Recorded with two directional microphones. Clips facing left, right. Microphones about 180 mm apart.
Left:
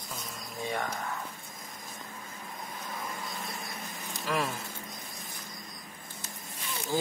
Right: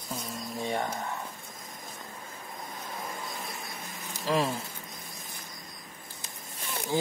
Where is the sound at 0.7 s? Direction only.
25° right (ahead or behind).